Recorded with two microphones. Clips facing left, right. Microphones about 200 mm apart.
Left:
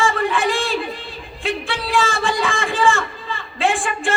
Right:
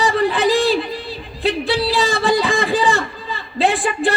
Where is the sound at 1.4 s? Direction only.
35° right (ahead or behind).